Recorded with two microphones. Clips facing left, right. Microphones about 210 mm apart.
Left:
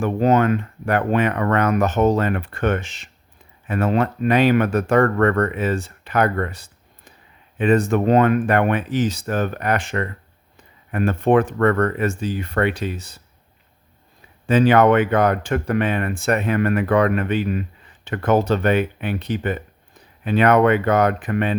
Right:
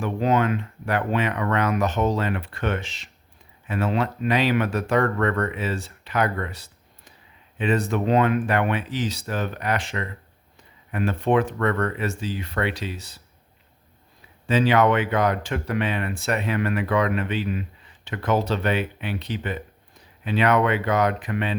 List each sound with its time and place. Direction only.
0.0 s speech: 45° left (ahead or behind)
14.4 s speech: 50° left (ahead or behind)